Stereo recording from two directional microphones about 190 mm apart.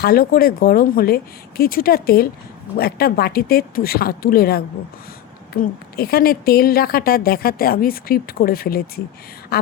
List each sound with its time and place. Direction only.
0.0 s a woman's voice: 50° left (ahead or behind)